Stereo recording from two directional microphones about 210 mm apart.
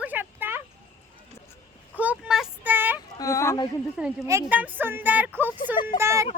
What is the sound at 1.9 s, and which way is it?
Speech, 5° right (ahead or behind).